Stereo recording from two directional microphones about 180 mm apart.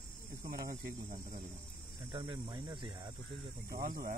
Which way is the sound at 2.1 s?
25° right (ahead or behind).